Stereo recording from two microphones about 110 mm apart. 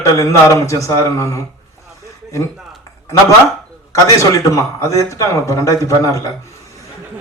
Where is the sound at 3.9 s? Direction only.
30° left (ahead or behind).